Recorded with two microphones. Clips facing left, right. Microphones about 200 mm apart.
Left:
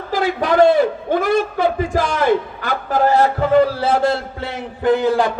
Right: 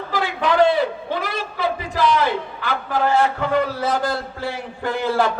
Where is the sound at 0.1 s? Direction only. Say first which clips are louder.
Left 4 dB; 45° left (ahead or behind).